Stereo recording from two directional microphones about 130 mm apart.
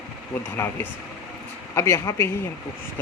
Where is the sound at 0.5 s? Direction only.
20° left (ahead or behind).